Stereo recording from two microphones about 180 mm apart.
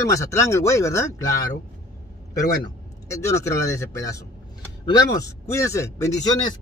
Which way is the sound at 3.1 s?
15° left (ahead or behind).